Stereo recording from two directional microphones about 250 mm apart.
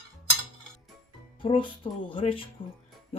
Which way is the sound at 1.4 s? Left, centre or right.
Centre.